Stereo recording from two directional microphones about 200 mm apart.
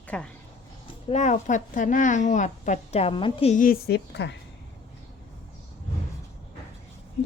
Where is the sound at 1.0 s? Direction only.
35° left (ahead or behind); by 4.4 s 55° left (ahead or behind).